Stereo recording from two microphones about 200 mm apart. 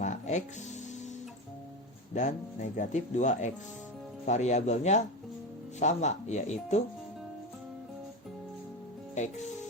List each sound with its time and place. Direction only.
0.0 s music: 35° left (ahead or behind)
2.1 s speech: 35° left (ahead or behind)
9.1 s speech: 35° left (ahead or behind)